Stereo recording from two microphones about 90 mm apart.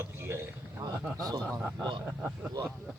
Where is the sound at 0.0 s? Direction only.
25° right (ahead or behind).